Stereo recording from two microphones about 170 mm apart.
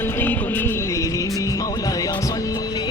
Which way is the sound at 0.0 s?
10° left (ahead or behind).